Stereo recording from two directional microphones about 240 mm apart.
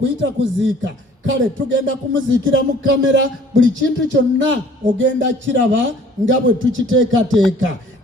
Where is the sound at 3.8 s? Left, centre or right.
Right.